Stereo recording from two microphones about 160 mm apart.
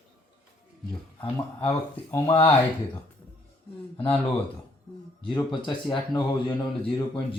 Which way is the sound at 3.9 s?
35° left (ahead or behind).